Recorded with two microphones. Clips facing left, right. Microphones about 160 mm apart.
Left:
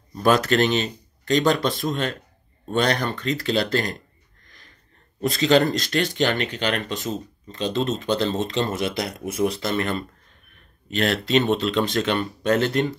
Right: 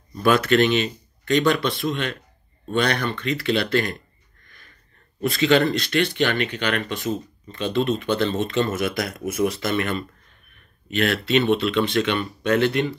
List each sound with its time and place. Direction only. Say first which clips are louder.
0.2 s speech: right 1 dB; 40° left (ahead or behind)
5.2 s speech: even; 40° left (ahead or behind)